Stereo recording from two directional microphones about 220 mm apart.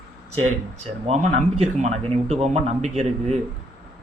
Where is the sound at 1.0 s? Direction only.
30° right (ahead or behind).